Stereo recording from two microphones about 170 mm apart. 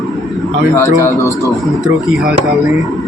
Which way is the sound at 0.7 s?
15° left (ahead or behind).